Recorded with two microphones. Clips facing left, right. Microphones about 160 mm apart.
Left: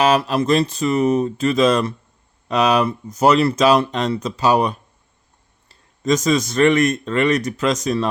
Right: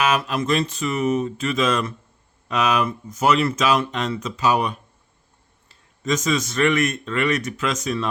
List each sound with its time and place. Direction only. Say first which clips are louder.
0.0 s speech: left 5 dB; 35° left (ahead or behind)